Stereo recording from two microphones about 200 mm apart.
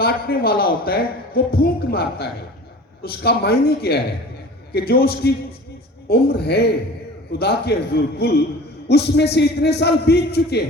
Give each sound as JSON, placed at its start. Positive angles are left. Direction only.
{"t": 0.0, "sound": "a man's voice", "side_deg": 50}